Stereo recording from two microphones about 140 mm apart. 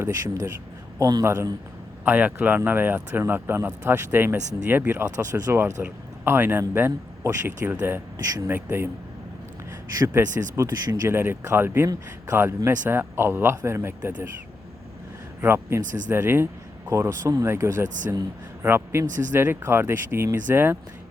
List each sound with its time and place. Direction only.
0.0 s a man's voice: 20° right (ahead or behind)
10.2 s speech: 15° right (ahead or behind)
15.4 s speech: 15° right (ahead or behind)
15.8 s speech: 65° right (ahead or behind)
16.0 s a man's voice: 15° right (ahead or behind)
17.8 s speech: 65° right (ahead or behind)
18.1 s a man's voice: 20° right (ahead or behind)